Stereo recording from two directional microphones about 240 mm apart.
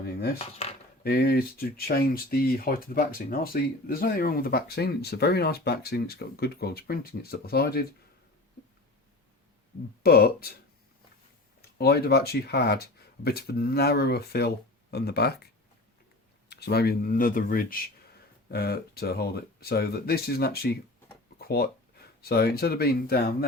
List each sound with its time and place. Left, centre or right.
0.3 s speech: left
1.0 s speech: left
10.0 s speech: left
11.8 s speech: left
16.5 s speech: left